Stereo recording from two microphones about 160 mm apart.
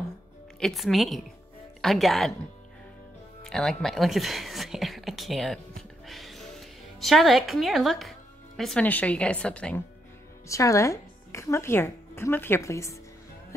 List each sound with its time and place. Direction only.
0.6 s a woman's voice: centre (ahead or behind)
3.4 s speech: 5° left (ahead or behind)
10.5 s a woman's voice: 20° left (ahead or behind)